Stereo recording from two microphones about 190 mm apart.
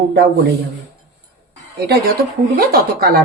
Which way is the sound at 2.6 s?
50° right (ahead or behind).